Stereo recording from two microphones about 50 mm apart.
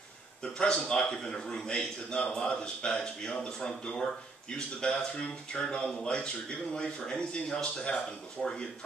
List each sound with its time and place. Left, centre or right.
0.4 s a man's voice: centre